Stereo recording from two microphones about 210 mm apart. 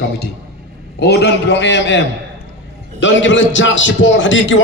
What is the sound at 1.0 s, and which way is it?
A man's voice, 50° left (ahead or behind).